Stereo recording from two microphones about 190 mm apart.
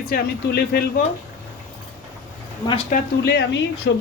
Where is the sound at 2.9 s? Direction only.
60° left (ahead or behind).